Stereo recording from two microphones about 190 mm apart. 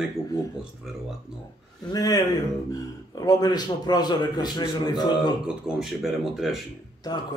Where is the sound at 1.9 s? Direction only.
20° left (ahead or behind).